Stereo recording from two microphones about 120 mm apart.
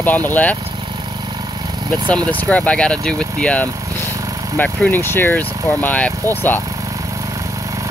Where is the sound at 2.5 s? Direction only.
10° left (ahead or behind).